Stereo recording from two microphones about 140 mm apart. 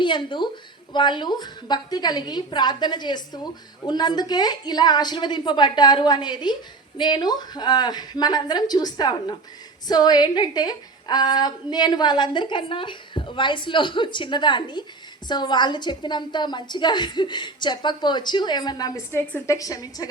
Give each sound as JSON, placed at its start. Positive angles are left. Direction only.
{"t": 0.0, "sound": "a woman's voice", "side_deg": 35}